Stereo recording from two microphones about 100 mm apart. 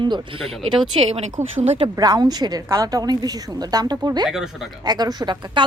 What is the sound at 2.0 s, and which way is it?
A woman's voice, 40° right (ahead or behind).